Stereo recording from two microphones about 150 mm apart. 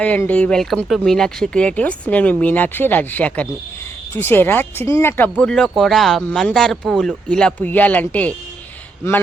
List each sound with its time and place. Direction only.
0.0 s speech: 10° left (ahead or behind)